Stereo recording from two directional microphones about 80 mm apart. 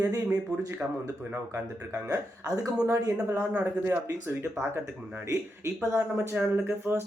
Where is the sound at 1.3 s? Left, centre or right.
Right.